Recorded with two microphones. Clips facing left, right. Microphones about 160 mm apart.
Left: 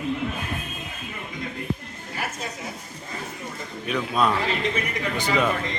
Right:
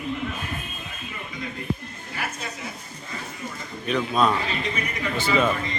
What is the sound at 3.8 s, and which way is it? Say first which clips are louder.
A man's voice: right 1 dB; 10° left (ahead or behind).